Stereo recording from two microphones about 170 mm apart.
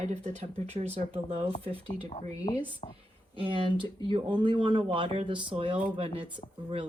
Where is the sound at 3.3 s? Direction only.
30° right (ahead or behind).